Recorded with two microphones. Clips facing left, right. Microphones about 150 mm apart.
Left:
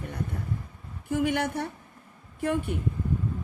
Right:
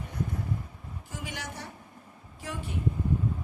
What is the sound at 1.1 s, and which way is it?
A woman's voice, 60° left (ahead or behind).